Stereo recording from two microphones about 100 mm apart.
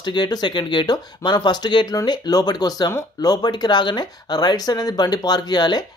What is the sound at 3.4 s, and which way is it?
Speech, 45° left (ahead or behind).